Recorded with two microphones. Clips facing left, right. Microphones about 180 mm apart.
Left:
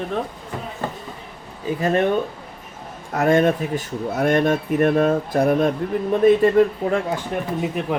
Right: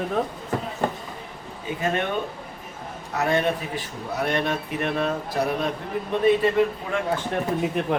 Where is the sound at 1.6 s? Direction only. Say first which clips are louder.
Left 6 dB; 35° left (ahead or behind).